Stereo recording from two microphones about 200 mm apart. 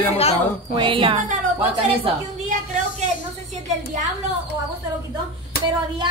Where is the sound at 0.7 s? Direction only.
25° right (ahead or behind).